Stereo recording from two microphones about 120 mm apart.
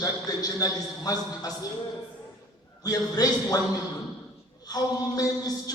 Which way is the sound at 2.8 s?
30° left (ahead or behind).